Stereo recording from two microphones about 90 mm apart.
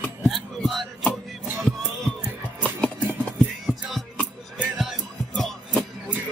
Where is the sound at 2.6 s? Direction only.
15° left (ahead or behind).